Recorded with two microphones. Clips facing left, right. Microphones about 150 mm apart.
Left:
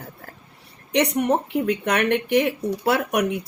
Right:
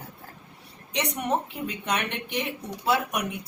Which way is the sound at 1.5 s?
80° left.